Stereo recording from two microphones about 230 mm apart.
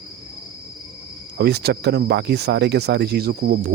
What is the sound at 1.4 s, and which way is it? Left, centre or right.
Speech, right.